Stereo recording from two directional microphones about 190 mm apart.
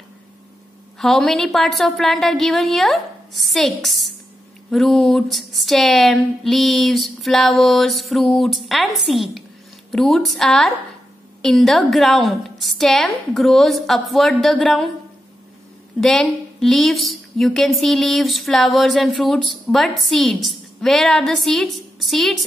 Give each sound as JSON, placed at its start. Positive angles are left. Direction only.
{"t": 0.9, "sound": "a woman's voice", "side_deg": 0}
{"t": 16.0, "sound": "a woman's voice", "side_deg": 0}